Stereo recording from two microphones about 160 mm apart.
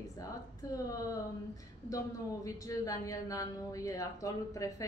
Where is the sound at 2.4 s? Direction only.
20° left (ahead or behind).